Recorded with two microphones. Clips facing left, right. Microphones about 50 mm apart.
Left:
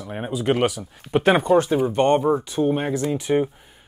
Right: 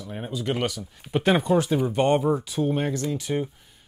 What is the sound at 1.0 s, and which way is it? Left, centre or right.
Speech, centre.